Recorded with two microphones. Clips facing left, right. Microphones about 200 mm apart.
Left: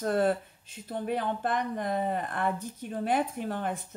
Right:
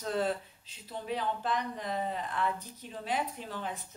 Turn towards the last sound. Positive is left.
turn(degrees=55)  # may be behind; listen again after turning